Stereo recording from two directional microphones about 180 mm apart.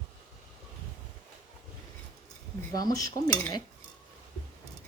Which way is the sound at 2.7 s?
20° left (ahead or behind).